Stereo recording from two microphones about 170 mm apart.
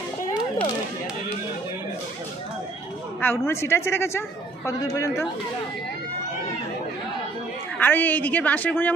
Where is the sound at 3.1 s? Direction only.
15° left (ahead or behind).